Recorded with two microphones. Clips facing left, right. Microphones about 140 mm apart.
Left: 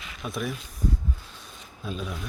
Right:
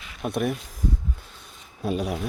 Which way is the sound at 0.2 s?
60° right (ahead or behind).